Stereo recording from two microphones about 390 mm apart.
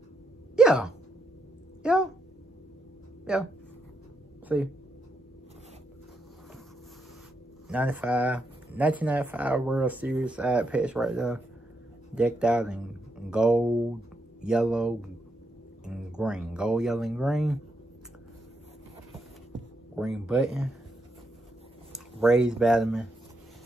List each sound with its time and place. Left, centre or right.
0.6 s a sound: centre
1.8 s speech: centre
3.3 s speech: centre
4.5 s speech: centre
7.6 s speech: centre
20.0 s speech: centre
21.9 s speech: centre